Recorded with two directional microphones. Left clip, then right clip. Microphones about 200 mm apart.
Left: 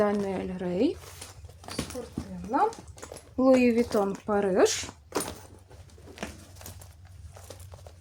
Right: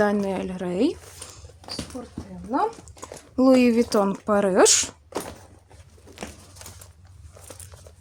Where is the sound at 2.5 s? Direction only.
45° right (ahead or behind).